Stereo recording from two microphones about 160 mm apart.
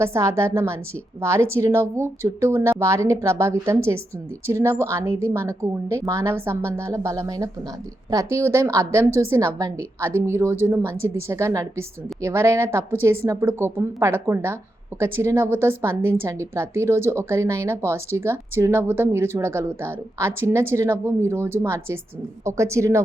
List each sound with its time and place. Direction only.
0.0 s a woman's voice: 20° right (ahead or behind)